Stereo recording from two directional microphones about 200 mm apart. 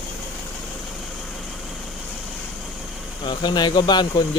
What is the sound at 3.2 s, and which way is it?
Speech, 20° left (ahead or behind).